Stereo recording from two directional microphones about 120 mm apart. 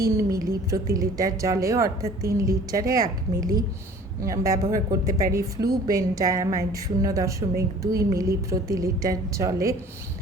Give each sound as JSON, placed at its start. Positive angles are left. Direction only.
{"t": 0.2, "sound": "a woman's voice", "side_deg": -30}